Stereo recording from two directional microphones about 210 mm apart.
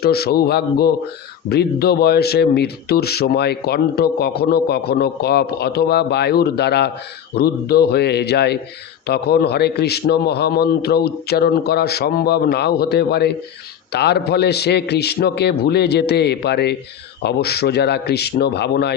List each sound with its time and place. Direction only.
0.0 s speech: 50° left (ahead or behind)